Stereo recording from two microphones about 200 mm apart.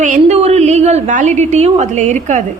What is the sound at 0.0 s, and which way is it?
A woman's voice, 35° right (ahead or behind).